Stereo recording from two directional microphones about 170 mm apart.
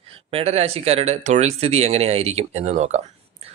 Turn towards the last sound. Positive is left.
turn(degrees=-40)  # may be behind; listen again after turning